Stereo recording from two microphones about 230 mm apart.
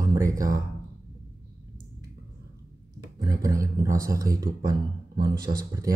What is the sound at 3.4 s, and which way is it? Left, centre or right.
Speech, centre.